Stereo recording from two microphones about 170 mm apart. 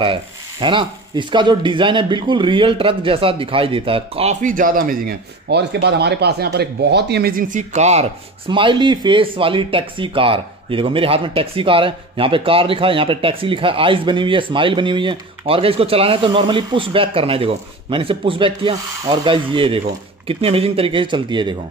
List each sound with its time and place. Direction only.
0.0 s speech: 30° right (ahead or behind)